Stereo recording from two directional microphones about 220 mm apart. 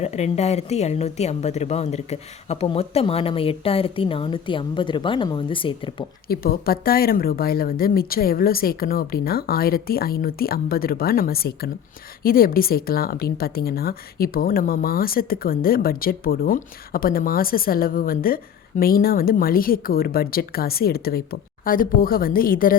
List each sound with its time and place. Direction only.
0.0 s a woman's voice: 30° left (ahead or behind)
6.2 s speech: 45° left (ahead or behind)